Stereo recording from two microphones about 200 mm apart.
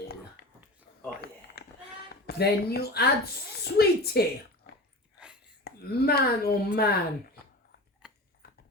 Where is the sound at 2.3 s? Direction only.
50° left (ahead or behind).